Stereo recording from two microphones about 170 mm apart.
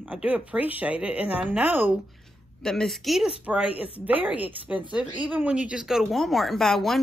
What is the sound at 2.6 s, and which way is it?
Speech, centre (ahead or behind).